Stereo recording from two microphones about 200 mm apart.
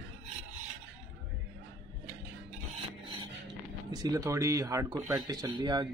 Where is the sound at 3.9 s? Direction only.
20° right (ahead or behind).